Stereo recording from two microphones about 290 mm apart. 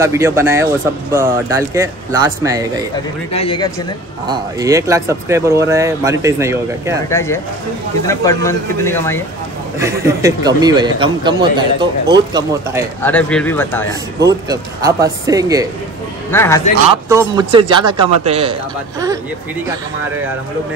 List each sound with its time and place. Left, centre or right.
0.0 s speech: centre
3.3 s speech: centre
4.3 s speech: centre
7.1 s speech: centre
9.8 s speech: centre
13.0 s speech: centre
14.2 s speech: centre
16.3 s speech: centre
16.9 s speech: centre